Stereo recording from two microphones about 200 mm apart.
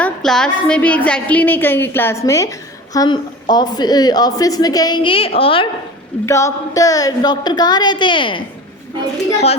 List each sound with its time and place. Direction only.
0.0 s a sound: 5° left (ahead or behind)
2.9 s a woman's voice: 20° left (ahead or behind)
6.2 s a woman's voice: 15° left (ahead or behind)